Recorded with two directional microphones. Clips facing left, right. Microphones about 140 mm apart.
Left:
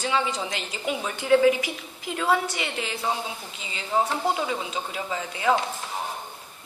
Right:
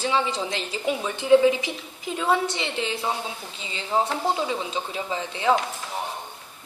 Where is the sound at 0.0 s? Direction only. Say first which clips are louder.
Right 2 dB; 30° right (ahead or behind).